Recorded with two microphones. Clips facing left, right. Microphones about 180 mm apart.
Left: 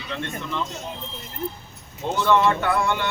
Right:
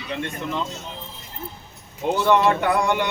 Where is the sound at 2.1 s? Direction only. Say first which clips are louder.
Right 1 dB; 15° right (ahead or behind).